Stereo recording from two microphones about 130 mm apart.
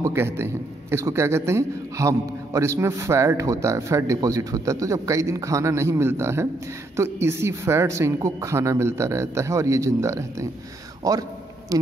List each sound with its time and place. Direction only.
0.0 s a man's voice: 20° right (ahead or behind)